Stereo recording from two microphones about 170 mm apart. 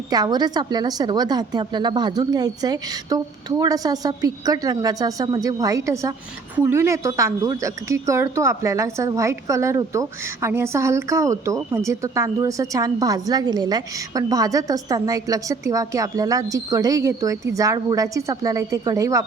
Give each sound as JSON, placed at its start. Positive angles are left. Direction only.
{"t": 0.1, "sound": "speech", "side_deg": -25}